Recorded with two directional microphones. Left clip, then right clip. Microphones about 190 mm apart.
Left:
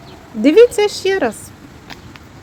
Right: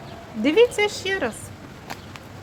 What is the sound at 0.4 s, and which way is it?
Speech, 15° left (ahead or behind).